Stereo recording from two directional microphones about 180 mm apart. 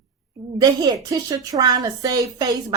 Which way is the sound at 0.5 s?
20° right (ahead or behind).